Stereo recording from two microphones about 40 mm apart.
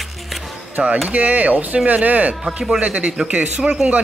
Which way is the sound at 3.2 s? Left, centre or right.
Right.